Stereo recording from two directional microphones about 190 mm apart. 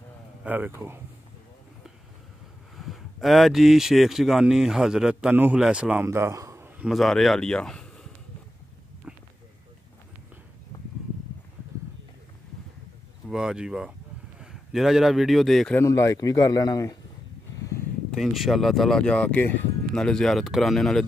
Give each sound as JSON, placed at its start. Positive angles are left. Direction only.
{"t": 0.4, "sound": "speech", "side_deg": -10}
{"t": 2.8, "sound": "speech", "side_deg": 0}
{"t": 6.9, "sound": "speech", "side_deg": 0}
{"t": 9.1, "sound": "a sound", "side_deg": -5}
{"t": 13.3, "sound": "a man's voice", "side_deg": -5}
{"t": 15.8, "sound": "a man's voice", "side_deg": 15}
{"t": 17.6, "sound": "a sound", "side_deg": 15}
{"t": 18.1, "sound": "speech", "side_deg": 0}